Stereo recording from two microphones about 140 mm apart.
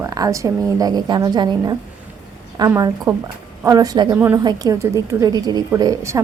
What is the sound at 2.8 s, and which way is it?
A woman's voice, 25° right (ahead or behind).